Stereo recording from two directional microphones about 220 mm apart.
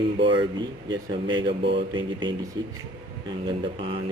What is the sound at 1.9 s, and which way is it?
Speech, 20° right (ahead or behind).